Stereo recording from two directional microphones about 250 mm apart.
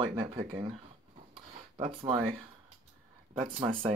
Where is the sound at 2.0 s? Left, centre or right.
Centre.